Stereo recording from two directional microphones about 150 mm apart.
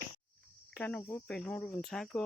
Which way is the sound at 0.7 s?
10° left (ahead or behind).